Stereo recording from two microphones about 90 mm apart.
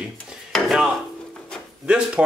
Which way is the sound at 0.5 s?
5° right (ahead or behind).